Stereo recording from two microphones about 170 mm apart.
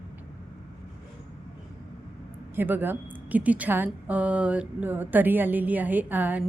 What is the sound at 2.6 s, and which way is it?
A woman's voice, 10° right (ahead or behind).